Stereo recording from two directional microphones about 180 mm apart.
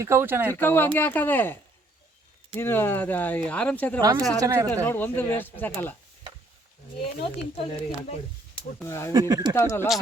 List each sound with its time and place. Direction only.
0.0 s speech: 15° right (ahead or behind)
0.6 s speech: 10° left (ahead or behind)
2.6 s speech: 15° left (ahead or behind)
4.4 s speech: 20° right (ahead or behind)
4.7 s speech: 10° left (ahead or behind)
7.5 s speech: 35° left (ahead or behind)
8.8 s speech: 15° left (ahead or behind)
9.1 s speech: 20° right (ahead or behind)
9.6 s speech: 15° left (ahead or behind)